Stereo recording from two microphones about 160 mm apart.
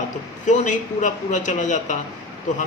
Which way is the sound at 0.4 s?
50° left (ahead or behind).